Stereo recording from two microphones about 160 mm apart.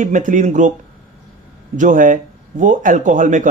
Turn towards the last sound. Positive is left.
turn(degrees=-50)  # may be behind; listen again after turning